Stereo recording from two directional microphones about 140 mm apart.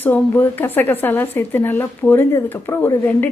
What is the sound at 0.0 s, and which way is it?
A woman's voice, 15° left (ahead or behind).